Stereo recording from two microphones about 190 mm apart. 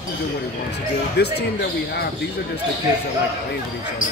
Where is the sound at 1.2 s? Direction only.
60° left (ahead or behind).